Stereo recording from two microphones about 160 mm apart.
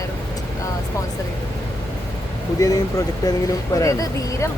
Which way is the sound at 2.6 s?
20° left (ahead or behind).